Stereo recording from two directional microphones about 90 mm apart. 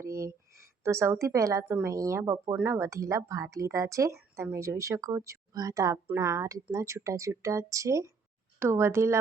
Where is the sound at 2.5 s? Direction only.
25° right (ahead or behind).